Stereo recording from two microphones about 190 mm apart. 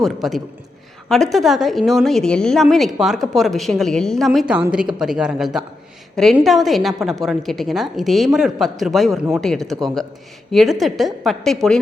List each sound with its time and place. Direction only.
0.0 s a woman's voice: centre (ahead or behind)